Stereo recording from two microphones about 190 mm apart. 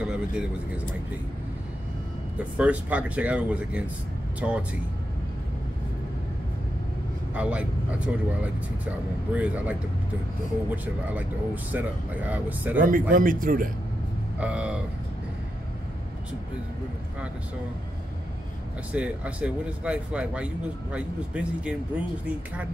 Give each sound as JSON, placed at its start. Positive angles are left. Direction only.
{"t": 0.0, "sound": "a sound", "side_deg": -5}
{"t": 2.3, "sound": "speech", "side_deg": -5}
{"t": 7.3, "sound": "speech", "side_deg": -5}
{"t": 9.3, "sound": "speech", "side_deg": -5}
{"t": 13.1, "sound": "speech", "side_deg": -45}
{"t": 14.4, "sound": "speech", "side_deg": -5}
{"t": 18.9, "sound": "speech", "side_deg": -5}